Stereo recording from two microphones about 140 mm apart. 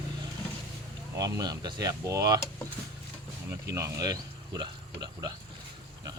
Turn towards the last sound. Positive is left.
turn(degrees=-30)  # may be behind; listen again after turning